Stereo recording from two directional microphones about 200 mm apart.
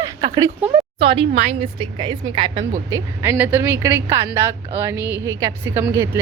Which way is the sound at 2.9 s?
15° right (ahead or behind).